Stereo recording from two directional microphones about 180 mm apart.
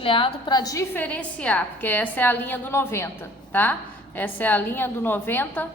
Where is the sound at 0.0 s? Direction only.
30° left (ahead or behind).